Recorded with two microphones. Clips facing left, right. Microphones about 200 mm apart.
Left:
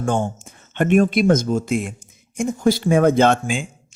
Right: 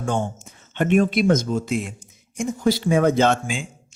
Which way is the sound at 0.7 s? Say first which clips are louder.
Left 2 dB; 50° left (ahead or behind).